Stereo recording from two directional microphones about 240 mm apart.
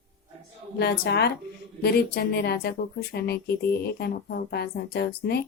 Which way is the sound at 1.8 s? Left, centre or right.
Left.